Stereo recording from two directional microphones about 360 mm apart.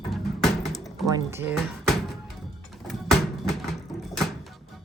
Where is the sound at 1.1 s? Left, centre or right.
Centre.